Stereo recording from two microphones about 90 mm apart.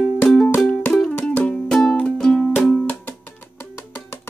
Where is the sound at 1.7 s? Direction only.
5° left (ahead or behind).